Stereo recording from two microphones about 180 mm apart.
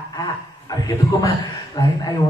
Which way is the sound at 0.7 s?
20° left (ahead or behind).